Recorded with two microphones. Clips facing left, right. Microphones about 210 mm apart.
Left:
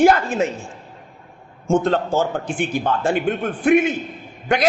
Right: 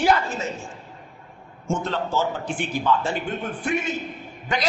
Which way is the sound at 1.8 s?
50° left (ahead or behind).